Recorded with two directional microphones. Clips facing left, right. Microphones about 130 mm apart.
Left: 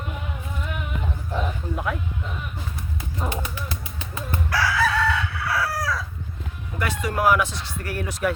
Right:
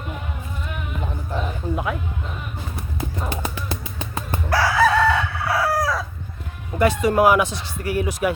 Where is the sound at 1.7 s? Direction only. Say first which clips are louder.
Right 2 dB; 5° right (ahead or behind).